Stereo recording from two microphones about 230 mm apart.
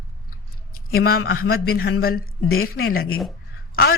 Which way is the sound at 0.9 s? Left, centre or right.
Left.